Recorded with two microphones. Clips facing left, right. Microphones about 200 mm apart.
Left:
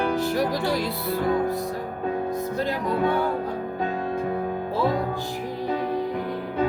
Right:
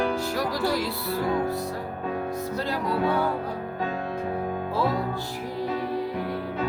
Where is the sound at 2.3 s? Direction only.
20° left (ahead or behind).